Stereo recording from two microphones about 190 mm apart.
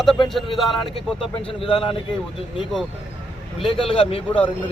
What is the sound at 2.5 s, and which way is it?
Speech, centre (ahead or behind).